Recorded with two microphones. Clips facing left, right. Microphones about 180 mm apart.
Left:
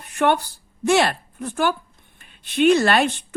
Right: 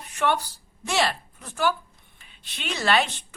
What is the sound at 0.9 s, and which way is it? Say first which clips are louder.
Speech: left 7 dB; 55° left (ahead or behind).